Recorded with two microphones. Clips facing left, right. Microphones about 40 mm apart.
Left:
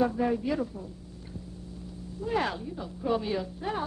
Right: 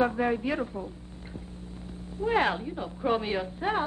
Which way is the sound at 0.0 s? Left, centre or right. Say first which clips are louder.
Right 1 dB; right.